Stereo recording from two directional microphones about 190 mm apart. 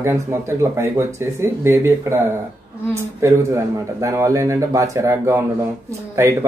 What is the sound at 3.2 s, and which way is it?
Speech, 15° right (ahead or behind).